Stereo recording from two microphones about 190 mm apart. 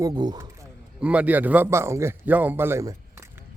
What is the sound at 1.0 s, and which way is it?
A man's voice, 5° right (ahead or behind).